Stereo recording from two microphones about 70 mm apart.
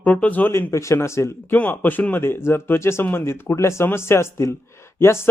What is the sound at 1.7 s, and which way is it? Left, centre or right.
Speech, left.